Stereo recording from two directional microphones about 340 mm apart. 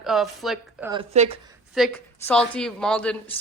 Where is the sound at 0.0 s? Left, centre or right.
Centre.